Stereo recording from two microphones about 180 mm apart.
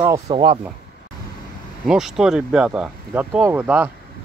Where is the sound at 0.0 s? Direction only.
15° right (ahead or behind).